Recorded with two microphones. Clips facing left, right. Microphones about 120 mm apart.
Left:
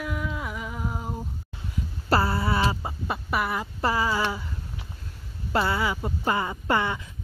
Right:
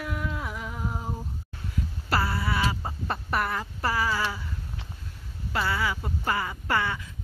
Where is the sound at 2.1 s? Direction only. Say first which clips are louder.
Left 4 dB; 30° left (ahead or behind).